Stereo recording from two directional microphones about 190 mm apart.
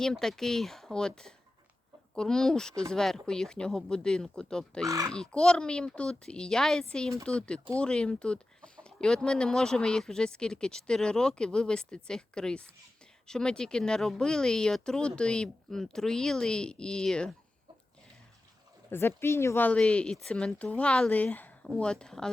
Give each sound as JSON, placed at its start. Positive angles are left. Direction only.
{"t": 0.0, "sound": "speech", "side_deg": 5}
{"t": 4.9, "sound": "speech", "side_deg": -15}
{"t": 5.1, "sound": "speech", "side_deg": 5}
{"t": 18.9, "sound": "speech", "side_deg": 10}